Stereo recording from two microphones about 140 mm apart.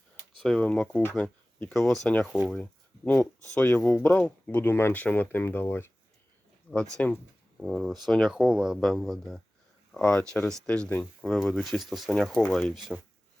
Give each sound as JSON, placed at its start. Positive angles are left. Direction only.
{"t": 0.4, "sound": "speech", "side_deg": 5}
{"t": 6.9, "sound": "speech", "side_deg": 10}
{"t": 7.6, "sound": "speech", "side_deg": 0}